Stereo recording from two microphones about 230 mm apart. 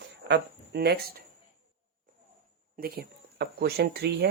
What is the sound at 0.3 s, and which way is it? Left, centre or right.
Speech, right.